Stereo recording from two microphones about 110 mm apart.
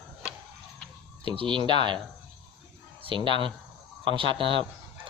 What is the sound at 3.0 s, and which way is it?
Speech, 50° right (ahead or behind).